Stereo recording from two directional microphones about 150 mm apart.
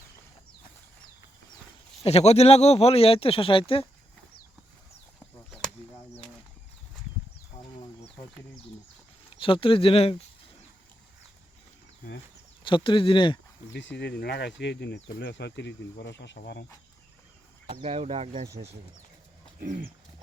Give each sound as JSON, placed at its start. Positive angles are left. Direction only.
{"t": 2.0, "sound": "speech", "side_deg": 45}
{"t": 7.5, "sound": "a sound", "side_deg": 50}
{"t": 9.4, "sound": "speech", "side_deg": 35}
{"t": 12.6, "sound": "speech", "side_deg": 35}
{"t": 14.1, "sound": "speech", "side_deg": 90}
{"t": 17.7, "sound": "speech", "side_deg": -45}
{"t": 19.5, "sound": "horse", "side_deg": -60}